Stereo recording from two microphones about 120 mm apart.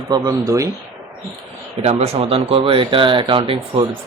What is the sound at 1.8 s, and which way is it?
Speech, 60° right (ahead or behind).